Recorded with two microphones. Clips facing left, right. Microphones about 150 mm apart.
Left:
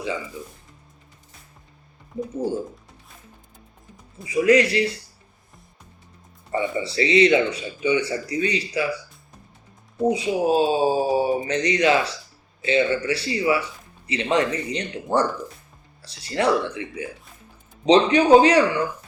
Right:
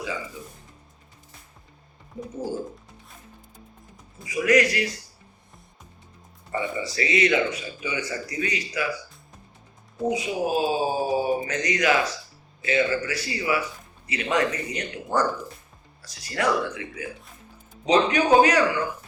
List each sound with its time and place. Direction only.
4.3 s a man's voice: 30° left (ahead or behind)
6.5 s a man's voice: 25° left (ahead or behind)
10.1 s a man's voice: 30° left (ahead or behind)